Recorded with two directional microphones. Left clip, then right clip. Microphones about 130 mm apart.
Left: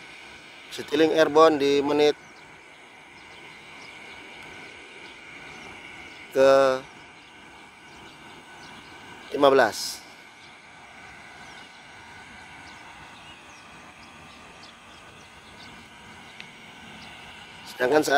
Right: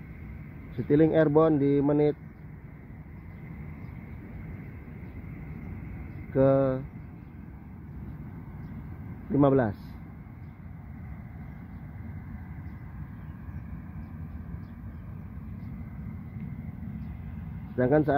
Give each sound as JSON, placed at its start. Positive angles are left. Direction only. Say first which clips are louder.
{"t": 0.7, "sound": "speech", "louder": "left 1 dB", "side_deg": 20}
{"t": 6.3, "sound": "speech", "louder": "left 6 dB", "side_deg": 25}
{"t": 9.4, "sound": "speech", "louder": "left 6 dB", "side_deg": 25}
{"t": 17.7, "sound": "a man's voice", "louder": "left 3 dB", "side_deg": 25}